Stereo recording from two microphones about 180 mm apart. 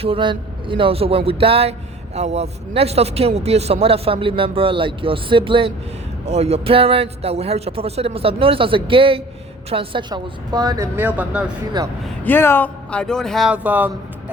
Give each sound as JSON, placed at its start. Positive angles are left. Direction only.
{"t": 0.0, "sound": "a man's voice", "side_deg": -30}
{"t": 12.0, "sound": "a man's voice", "side_deg": 10}